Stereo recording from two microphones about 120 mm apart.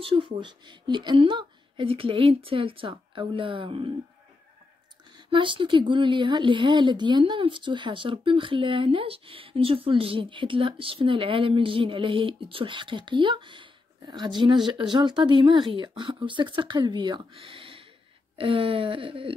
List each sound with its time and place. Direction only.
0.0 s a woman's voice: 45° right (ahead or behind)
5.3 s a woman's voice: 45° right (ahead or behind)